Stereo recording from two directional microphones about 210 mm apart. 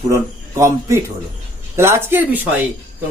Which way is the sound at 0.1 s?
15° right (ahead or behind).